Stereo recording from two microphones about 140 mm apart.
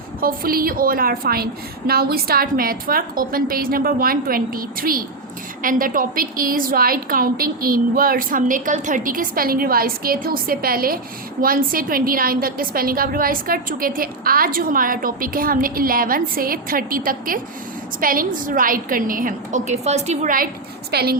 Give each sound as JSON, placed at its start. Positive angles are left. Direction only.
{"t": 0.2, "sound": "a woman's voice", "side_deg": -90}